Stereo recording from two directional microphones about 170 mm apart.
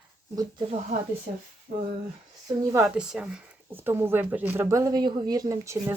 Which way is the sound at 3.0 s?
5° right (ahead or behind).